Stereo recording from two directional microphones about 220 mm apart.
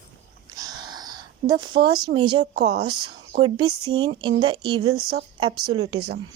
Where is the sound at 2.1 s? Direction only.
20° right (ahead or behind).